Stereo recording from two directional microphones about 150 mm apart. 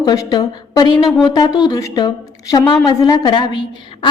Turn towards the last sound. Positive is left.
turn(degrees=30)  # may be behind; listen again after turning